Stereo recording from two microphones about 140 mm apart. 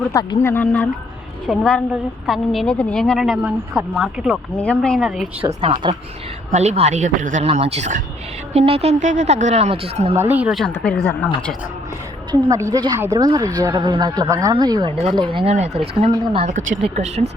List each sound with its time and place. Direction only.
0.1 s speech: 25° left (ahead or behind)
0.4 s a woman's voice: 10° left (ahead or behind); by 4.4 s 5° right (ahead or behind)
4.5 s a woman's voice: 10° left (ahead or behind)
5.4 s a woman's voice: 40° right (ahead or behind)
6.5 s a man's voice: 55° right (ahead or behind)
8.5 s a woman's voice: 45° right (ahead or behind)
10.2 s speech: 10° right (ahead or behind)
10.8 s speech: 10° left (ahead or behind)
12.3 s a woman's voice: 25° right (ahead or behind)
15.5 s a woman's voice: 50° right (ahead or behind)